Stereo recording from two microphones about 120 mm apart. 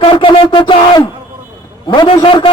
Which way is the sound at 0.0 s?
45° left (ahead or behind).